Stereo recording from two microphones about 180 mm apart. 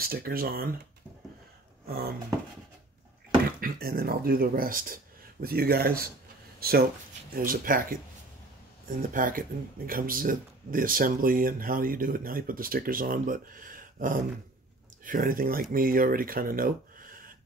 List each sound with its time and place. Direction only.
0.0 s speech: 55° right (ahead or behind)
1.9 s speech: 60° right (ahead or behind)
3.6 s speech: 55° right (ahead or behind)